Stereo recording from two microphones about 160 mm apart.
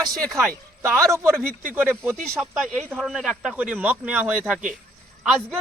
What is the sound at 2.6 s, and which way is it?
Speech, centre (ahead or behind).